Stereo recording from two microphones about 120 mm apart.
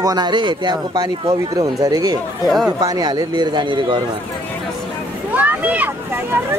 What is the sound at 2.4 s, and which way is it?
Speech, centre (ahead or behind).